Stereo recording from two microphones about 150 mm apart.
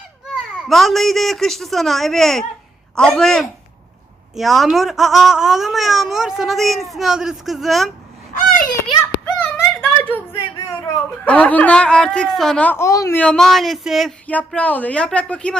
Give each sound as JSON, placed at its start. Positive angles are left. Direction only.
{"t": 0.3, "sound": "speech", "side_deg": 0}
{"t": 8.3, "sound": "a sound", "side_deg": 70}
{"t": 9.2, "sound": "a sound", "side_deg": 10}
{"t": 11.3, "sound": "a child's voice", "side_deg": 10}
{"t": 13.1, "sound": "speech", "side_deg": 5}
{"t": 14.3, "sound": "a child's voice", "side_deg": 10}